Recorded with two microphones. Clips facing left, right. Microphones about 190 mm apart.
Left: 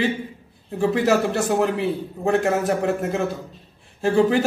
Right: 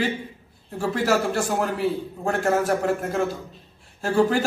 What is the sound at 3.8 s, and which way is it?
Speech, 20° left (ahead or behind).